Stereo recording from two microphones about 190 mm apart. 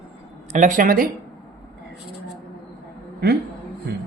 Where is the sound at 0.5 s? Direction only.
40° right (ahead or behind).